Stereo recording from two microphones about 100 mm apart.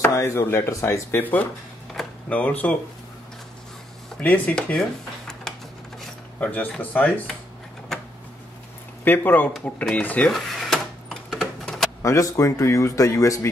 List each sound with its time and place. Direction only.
0.0 s chopping: 25° left (ahead or behind)
2.2 s speech: 15° left (ahead or behind)
4.2 s speech: 15° left (ahead or behind)
6.4 s speech: 15° left (ahead or behind)
9.0 s chopping: 20° left (ahead or behind)
9.8 s speech: 15° left (ahead or behind)
10.3 s cash register: centre (ahead or behind)
12.0 s speech: 30° left (ahead or behind)